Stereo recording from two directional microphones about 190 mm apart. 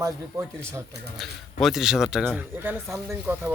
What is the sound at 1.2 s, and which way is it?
Speech, centre (ahead or behind).